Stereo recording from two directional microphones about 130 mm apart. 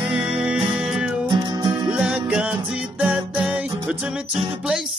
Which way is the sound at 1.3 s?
35° right (ahead or behind).